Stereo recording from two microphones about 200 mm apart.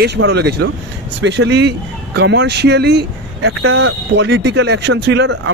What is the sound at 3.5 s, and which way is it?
Speech, 90° right.